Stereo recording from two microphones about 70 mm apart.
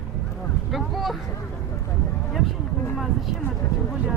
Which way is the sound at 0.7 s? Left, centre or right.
Centre.